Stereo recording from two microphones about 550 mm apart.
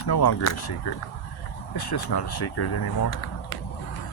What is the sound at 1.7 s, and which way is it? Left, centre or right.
Speech, left.